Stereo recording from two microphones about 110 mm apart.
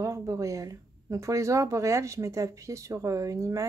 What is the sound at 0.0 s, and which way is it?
Speech, 30° right (ahead or behind).